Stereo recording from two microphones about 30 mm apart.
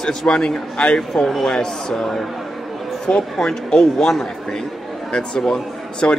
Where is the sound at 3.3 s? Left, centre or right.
Centre.